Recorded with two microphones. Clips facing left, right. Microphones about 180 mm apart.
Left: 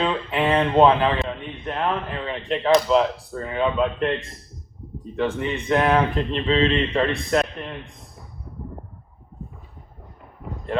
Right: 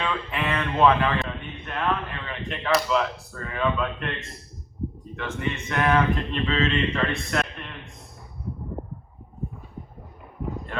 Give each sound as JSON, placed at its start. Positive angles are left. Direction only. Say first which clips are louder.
{"t": 0.0, "sound": "a sound", "louder": "left 6 dB", "side_deg": 30}
{"t": 1.6, "sound": "speech", "louder": "left 2 dB", "side_deg": 30}
{"t": 5.1, "sound": "speech", "louder": "left 7 dB", "side_deg": 30}